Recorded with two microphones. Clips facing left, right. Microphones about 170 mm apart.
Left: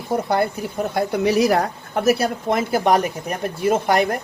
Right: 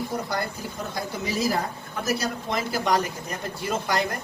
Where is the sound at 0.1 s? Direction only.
60° left (ahead or behind).